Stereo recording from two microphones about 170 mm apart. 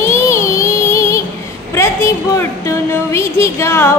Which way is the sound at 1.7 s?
15° left (ahead or behind).